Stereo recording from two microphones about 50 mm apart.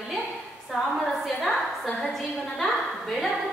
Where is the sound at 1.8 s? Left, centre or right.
Centre.